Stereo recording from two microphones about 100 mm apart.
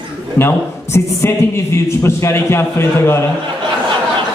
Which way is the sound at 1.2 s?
25° left (ahead or behind).